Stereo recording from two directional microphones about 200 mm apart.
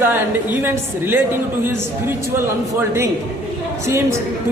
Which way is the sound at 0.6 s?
10° right (ahead or behind).